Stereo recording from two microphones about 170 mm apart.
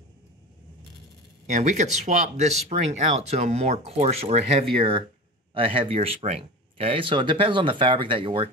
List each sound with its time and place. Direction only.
1.5 s speech: 45° right (ahead or behind)